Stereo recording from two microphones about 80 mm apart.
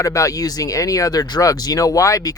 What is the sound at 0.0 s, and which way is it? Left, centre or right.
Speech, left.